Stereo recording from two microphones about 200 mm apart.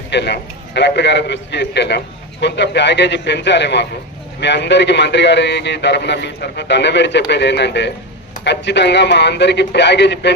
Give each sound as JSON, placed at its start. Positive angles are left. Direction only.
{"t": 0.1, "sound": "a man's voice", "side_deg": 60}